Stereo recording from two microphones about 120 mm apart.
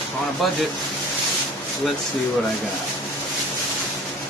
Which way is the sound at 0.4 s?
Centre (ahead or behind).